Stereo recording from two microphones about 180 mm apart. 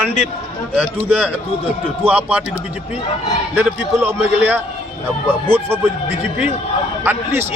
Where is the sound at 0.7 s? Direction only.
5° right (ahead or behind).